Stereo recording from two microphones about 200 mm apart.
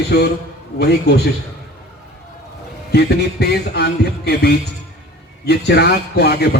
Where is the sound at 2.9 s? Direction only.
55° left (ahead or behind).